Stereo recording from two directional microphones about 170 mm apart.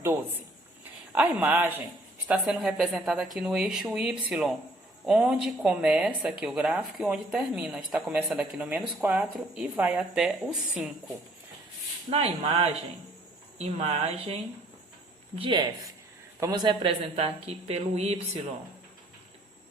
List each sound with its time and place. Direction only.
1.1 s a woman's voice: 10° right (ahead or behind)
12.1 s speech: 35° right (ahead or behind)